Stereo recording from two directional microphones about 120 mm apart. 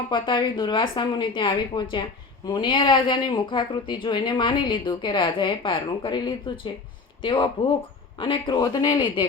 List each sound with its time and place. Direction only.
0.1 s speech: 40° left (ahead or behind)